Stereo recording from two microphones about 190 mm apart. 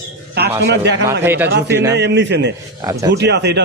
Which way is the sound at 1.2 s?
10° right (ahead or behind).